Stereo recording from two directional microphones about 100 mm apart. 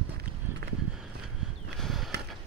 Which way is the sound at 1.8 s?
Centre (ahead or behind).